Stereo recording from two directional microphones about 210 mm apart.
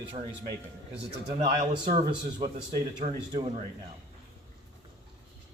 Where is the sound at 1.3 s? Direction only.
30° right (ahead or behind).